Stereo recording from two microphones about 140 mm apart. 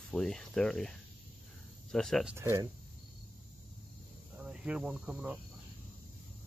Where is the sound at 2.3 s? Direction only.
20° right (ahead or behind).